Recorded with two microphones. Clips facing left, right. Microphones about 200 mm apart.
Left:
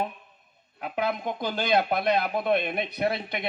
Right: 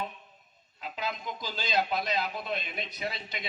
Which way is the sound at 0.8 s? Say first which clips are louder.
Left 8 dB; 60° left (ahead or behind).